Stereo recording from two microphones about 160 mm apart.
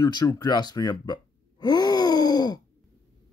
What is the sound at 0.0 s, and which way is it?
Speech, 25° left (ahead or behind).